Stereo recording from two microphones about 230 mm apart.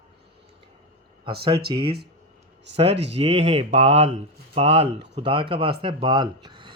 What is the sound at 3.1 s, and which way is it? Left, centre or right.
Speech, right.